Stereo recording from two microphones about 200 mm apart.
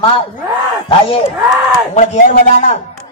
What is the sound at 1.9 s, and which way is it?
Speech, 35° left (ahead or behind).